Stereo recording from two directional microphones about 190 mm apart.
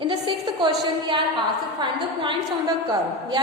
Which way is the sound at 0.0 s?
25° right (ahead or behind).